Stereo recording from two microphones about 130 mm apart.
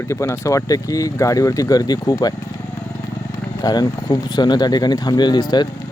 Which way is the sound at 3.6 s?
30° left (ahead or behind).